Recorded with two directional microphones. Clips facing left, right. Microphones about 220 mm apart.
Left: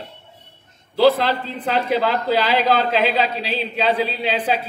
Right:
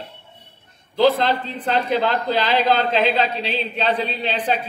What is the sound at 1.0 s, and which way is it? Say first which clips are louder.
A man's voice: left 1 dB; 10° left (ahead or behind).